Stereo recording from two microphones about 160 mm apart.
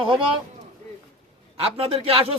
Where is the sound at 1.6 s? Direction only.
40° right (ahead or behind).